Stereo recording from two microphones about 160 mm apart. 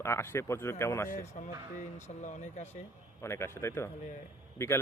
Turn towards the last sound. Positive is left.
turn(degrees=15)  # may be behind; listen again after turning